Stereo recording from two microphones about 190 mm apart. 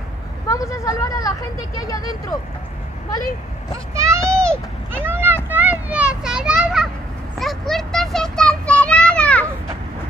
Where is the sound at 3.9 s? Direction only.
15° right (ahead or behind).